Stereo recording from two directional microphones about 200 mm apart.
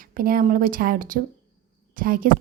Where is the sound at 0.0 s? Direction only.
45° right (ahead or behind).